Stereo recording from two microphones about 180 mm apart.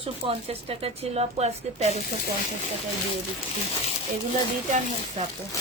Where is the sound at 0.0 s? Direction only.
30° right (ahead or behind).